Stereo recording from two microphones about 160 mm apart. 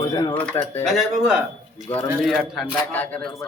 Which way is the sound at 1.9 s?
10° left (ahead or behind).